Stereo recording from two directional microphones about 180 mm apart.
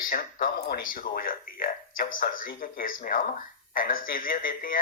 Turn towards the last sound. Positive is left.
turn(degrees=50)  # may be behind; listen again after turning